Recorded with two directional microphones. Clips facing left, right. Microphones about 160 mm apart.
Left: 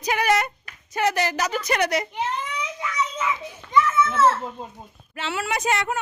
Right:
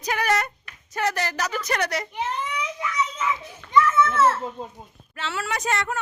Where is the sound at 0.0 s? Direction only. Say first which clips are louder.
Left 2 dB; 20° left (ahead or behind).